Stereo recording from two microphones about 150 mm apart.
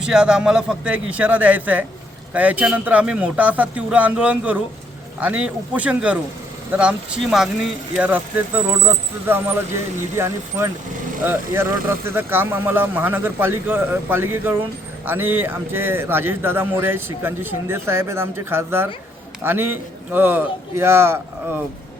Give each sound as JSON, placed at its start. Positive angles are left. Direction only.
{"t": 0.0, "sound": "a man's voice", "side_deg": -5}